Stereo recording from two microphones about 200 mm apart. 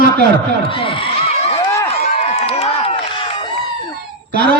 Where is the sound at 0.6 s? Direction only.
25° left (ahead or behind).